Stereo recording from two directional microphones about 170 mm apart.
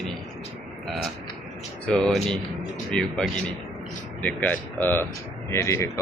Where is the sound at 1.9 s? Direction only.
5° left (ahead or behind).